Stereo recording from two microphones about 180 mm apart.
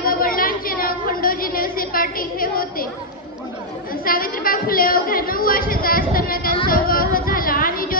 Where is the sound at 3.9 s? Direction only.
50° left (ahead or behind).